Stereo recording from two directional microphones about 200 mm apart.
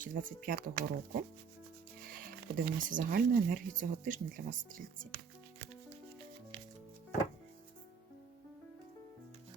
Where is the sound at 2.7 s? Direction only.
45° right (ahead or behind).